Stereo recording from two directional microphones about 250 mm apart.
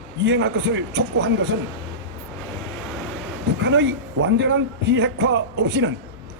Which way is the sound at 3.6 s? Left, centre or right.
Right.